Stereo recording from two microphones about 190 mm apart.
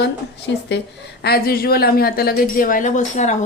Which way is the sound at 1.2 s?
55° left (ahead or behind).